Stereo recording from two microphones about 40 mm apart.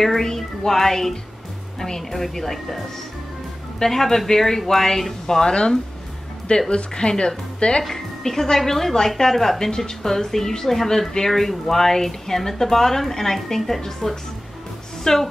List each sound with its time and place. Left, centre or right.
0.0 s a woman's voice: centre
3.8 s a woman's voice: centre
7.8 s a woman's voice: centre